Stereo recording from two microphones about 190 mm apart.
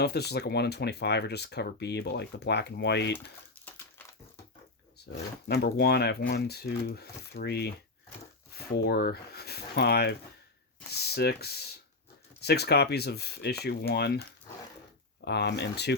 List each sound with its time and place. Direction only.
0.0 s speech: 60° left (ahead or behind)
4.9 s speech: 60° left (ahead or behind)